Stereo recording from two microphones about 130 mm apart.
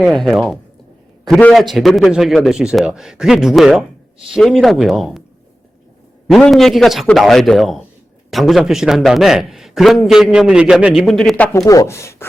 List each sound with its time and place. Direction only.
0.0 s a man's voice: centre (ahead or behind)
1.5 s a man's voice: centre (ahead or behind)
6.3 s a man's voice: centre (ahead or behind)
11.5 s speech: 25° left (ahead or behind)